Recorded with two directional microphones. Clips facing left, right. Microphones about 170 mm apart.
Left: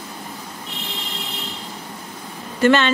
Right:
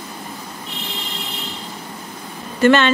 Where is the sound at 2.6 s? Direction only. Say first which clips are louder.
Right 2 dB; 60° right (ahead or behind).